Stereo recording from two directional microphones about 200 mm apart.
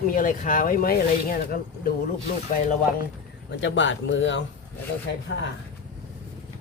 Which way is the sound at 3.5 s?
70° left (ahead or behind).